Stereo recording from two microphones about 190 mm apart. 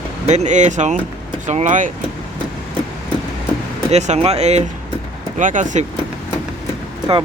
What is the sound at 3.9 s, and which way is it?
Speech, 35° right (ahead or behind).